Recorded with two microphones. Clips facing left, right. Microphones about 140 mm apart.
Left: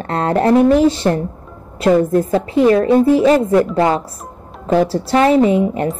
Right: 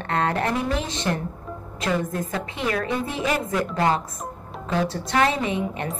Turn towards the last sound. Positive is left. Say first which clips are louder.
# left 13 dB
turn(degrees=30)  # may be behind; listen again after turning